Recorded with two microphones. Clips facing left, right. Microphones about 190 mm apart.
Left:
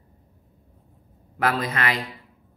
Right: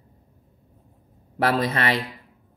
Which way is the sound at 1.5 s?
30° right (ahead or behind).